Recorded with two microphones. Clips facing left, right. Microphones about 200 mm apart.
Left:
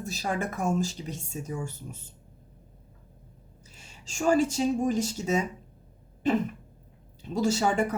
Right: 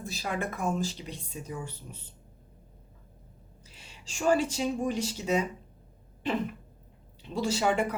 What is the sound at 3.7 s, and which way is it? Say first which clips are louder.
Speech: left 1 dB; 45° left (ahead or behind).